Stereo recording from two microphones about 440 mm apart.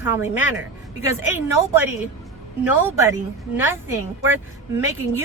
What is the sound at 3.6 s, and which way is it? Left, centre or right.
Speech, centre.